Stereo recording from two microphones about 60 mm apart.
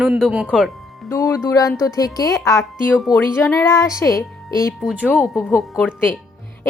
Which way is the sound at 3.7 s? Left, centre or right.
Left.